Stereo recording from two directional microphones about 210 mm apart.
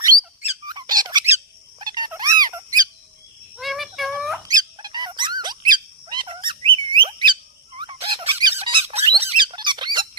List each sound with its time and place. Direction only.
0.7 s squeak: 20° right (ahead or behind)
1.8 s a sound: 20° right (ahead or behind)
3.5 s insect: centre (ahead or behind)
4.4 s squeak: 20° right (ahead or behind)
6.1 s bird: 20° right (ahead or behind)
7.8 s squeak: 25° right (ahead or behind)